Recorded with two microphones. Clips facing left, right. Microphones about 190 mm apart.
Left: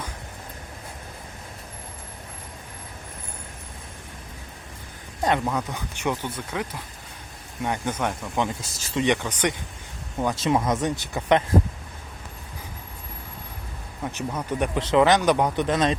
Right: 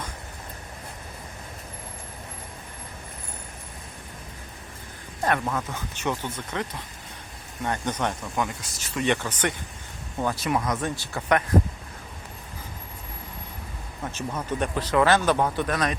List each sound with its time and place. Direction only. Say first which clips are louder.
5.2 s speech: left 2 dB; 20° left (ahead or behind)
8.4 s speech: left 5 dB; 25° left (ahead or behind)
9.0 s speech: left 1 dB; 15° left (ahead or behind)
10.2 s speech: left 3 dB; 25° left (ahead or behind)
14.0 s speech: left 2 dB; 15° left (ahead or behind)